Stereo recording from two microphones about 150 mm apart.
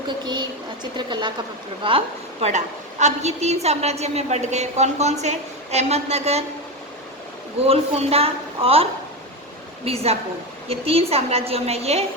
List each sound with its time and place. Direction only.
0.9 s a woman's voice: 30° right (ahead or behind)
7.7 s a woman's voice: 40° right (ahead or behind)